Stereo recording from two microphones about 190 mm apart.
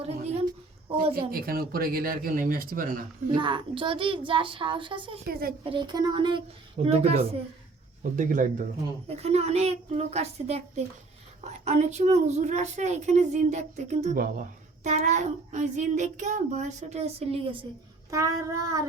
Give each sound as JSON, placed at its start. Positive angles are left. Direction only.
{"t": 0.0, "sound": "a sound", "side_deg": -30}
{"t": 1.1, "sound": "speech", "side_deg": -50}
{"t": 3.3, "sound": "a child's voice", "side_deg": -25}
{"t": 5.3, "sound": "speech", "side_deg": -50}
{"t": 5.6, "sound": "a child's voice", "side_deg": -25}
{"t": 8.1, "sound": "a woman's voice", "side_deg": -40}
{"t": 14.8, "sound": "a woman's voice", "side_deg": -40}
{"t": 18.1, "sound": "child singing", "side_deg": -15}